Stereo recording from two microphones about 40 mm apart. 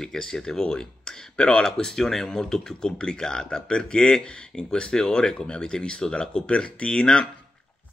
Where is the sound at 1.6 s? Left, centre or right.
Centre.